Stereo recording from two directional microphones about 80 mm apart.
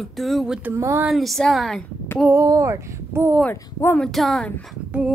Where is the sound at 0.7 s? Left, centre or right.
Right.